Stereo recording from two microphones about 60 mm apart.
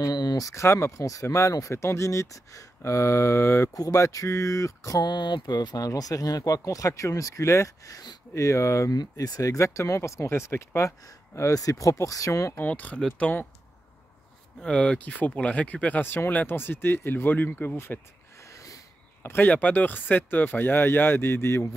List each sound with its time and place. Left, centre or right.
0.0 s a sound: left
0.7 s speech: left
3.9 s speech: left
5.8 s speech: left
8.9 s speech: left
10.9 s speech: left
12.5 s speech: left
14.6 s speech: centre; by 17.5 s left
17.7 s a sound: left
18.5 s a sound: left
19.4 s speech: left